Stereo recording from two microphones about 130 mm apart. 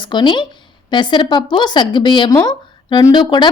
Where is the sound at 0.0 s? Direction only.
35° left (ahead or behind).